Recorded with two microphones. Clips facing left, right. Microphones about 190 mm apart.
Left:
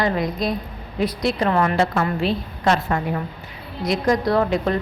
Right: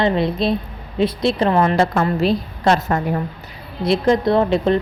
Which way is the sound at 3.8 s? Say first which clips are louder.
Right 4 dB; 25° right (ahead or behind).